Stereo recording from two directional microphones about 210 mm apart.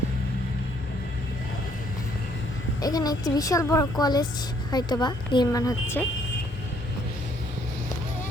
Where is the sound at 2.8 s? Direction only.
20° left (ahead or behind).